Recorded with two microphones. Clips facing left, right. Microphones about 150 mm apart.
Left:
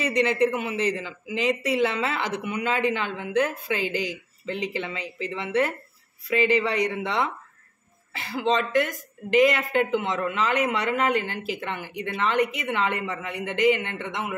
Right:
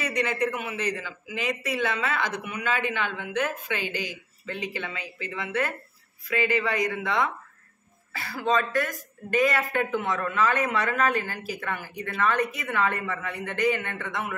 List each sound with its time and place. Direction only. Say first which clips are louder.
0.0 s speech: left 5 dB; 30° left (ahead or behind)